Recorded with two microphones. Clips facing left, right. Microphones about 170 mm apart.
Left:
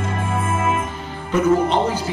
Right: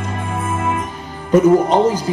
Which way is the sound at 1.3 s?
40° right (ahead or behind).